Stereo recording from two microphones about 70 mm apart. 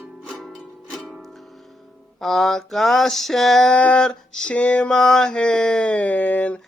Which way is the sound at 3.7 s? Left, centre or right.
Centre.